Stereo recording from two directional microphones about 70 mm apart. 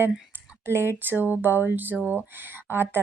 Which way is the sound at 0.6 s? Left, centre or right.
Right.